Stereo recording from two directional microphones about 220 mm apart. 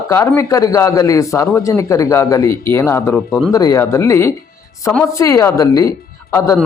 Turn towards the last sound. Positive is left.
turn(degrees=10)  # may be behind; listen again after turning